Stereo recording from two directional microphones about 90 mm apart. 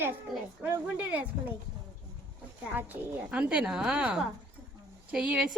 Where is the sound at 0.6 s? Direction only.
20° right (ahead or behind).